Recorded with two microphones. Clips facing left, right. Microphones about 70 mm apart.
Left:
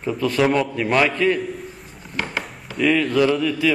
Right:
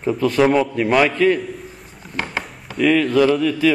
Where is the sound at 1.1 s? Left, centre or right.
Centre.